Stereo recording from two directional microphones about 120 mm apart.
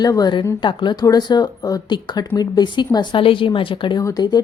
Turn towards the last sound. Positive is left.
turn(degrees=35)  # may be behind; listen again after turning